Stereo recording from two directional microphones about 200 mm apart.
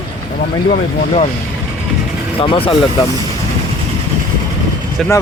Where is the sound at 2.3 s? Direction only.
25° left (ahead or behind).